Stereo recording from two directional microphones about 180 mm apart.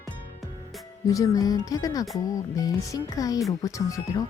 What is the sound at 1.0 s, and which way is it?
Speech, 20° left (ahead or behind).